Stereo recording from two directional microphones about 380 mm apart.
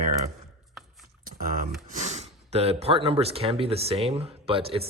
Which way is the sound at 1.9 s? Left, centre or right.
Centre.